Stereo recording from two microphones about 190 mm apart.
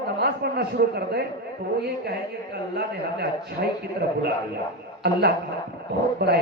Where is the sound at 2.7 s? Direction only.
55° right (ahead or behind).